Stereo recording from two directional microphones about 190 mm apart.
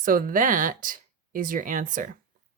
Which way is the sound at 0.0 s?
45° right (ahead or behind).